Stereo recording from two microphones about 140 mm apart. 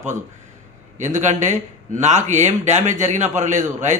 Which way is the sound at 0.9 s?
55° right (ahead or behind).